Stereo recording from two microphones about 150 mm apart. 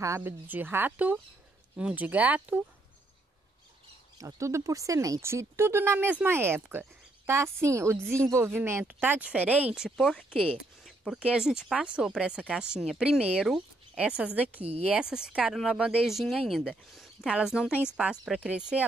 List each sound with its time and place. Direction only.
0.0 s speech: 15° right (ahead or behind)
4.2 s a woman's voice: 20° right (ahead or behind)